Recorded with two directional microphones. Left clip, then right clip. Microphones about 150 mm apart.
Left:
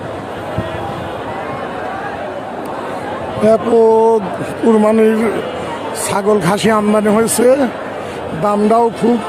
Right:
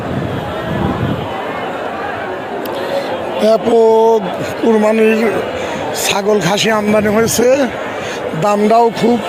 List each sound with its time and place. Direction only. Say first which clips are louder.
3.4 s a man's voice: even; 15° left (ahead or behind)